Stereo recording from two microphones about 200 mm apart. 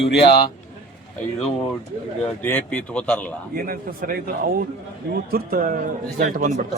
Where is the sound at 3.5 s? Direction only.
45° right (ahead or behind).